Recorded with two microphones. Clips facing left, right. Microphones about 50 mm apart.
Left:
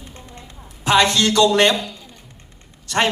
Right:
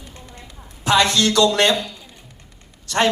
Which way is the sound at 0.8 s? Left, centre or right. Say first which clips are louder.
Left 1 dB; left.